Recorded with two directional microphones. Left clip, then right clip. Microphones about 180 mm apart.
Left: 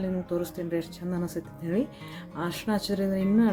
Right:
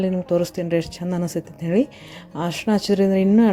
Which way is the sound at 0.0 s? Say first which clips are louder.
Right 10 dB; 45° right (ahead or behind).